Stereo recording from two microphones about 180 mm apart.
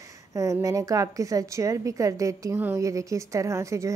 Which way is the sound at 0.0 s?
15° right (ahead or behind).